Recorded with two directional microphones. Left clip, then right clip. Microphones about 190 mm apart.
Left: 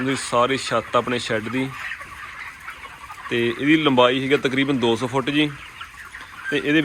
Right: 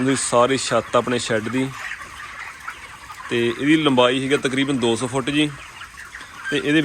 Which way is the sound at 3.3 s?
15° right (ahead or behind).